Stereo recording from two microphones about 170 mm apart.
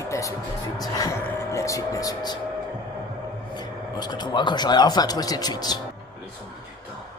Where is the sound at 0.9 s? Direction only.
20° left (ahead or behind).